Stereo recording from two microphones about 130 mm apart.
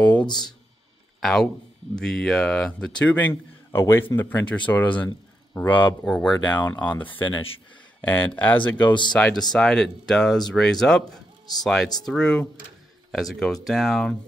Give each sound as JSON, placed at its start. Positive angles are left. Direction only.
{"t": 0.0, "sound": "a sound", "side_deg": 10}
{"t": 1.2, "sound": "speech", "side_deg": 5}
{"t": 3.7, "sound": "speech", "side_deg": 20}
{"t": 7.1, "sound": "speech", "side_deg": 40}
{"t": 8.1, "sound": "speech", "side_deg": 10}